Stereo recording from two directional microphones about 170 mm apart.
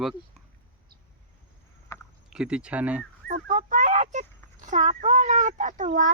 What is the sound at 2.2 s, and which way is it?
Speech, 5° right (ahead or behind).